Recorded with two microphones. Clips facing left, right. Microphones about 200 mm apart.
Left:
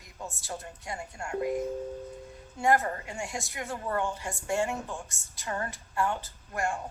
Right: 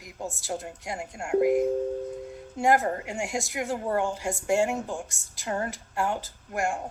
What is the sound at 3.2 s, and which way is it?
Speech, 85° right.